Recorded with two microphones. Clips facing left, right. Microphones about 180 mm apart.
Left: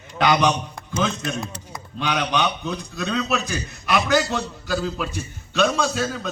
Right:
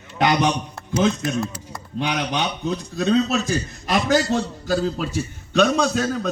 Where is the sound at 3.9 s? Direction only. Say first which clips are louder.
Right 2 dB; 45° right (ahead or behind).